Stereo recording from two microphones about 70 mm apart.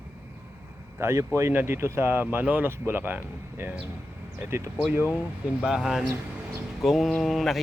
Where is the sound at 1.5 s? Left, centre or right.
Right.